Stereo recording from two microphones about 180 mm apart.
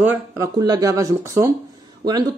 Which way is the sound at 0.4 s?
20° right (ahead or behind).